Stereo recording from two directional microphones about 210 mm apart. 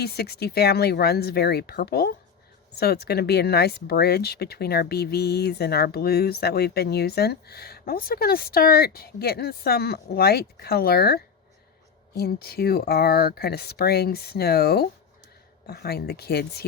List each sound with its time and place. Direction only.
0.0 s speech: 50° left (ahead or behind)